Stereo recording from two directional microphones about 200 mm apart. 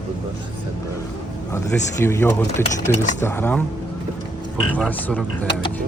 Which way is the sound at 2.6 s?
35° left (ahead or behind).